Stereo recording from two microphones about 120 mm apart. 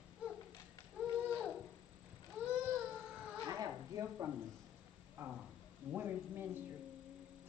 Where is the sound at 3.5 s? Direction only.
30° right (ahead or behind).